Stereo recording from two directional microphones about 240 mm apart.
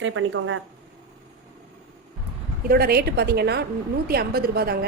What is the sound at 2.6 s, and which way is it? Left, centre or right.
A woman's voice, right.